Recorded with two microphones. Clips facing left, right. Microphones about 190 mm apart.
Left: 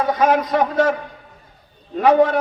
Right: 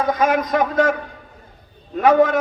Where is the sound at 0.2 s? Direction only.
45° right (ahead or behind).